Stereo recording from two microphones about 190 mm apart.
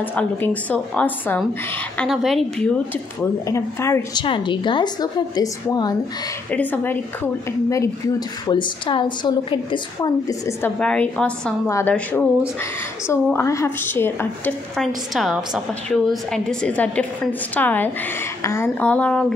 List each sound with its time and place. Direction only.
0.1 s a woman's voice: 10° left (ahead or behind)
3.4 s a woman's voice: 15° left (ahead or behind)
6.5 s a woman's voice: 10° left (ahead or behind)
8.5 s a woman's voice: 25° left (ahead or behind)
10.8 s a woman's voice: 5° left (ahead or behind)
15.1 s a woman's voice: centre (ahead or behind)